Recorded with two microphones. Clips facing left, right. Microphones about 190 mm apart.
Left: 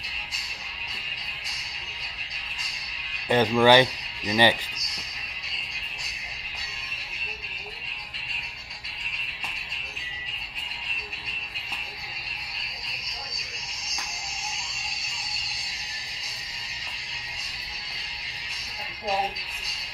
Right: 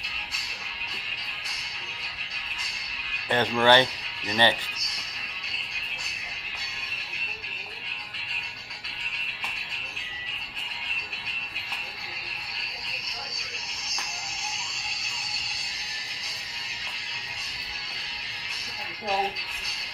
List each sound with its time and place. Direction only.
3.3 s speech: 10° left (ahead or behind)